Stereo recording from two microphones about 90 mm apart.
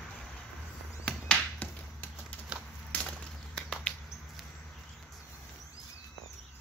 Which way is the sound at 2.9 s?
20° left (ahead or behind).